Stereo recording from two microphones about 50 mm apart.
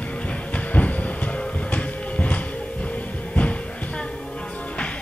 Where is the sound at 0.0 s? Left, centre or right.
Left.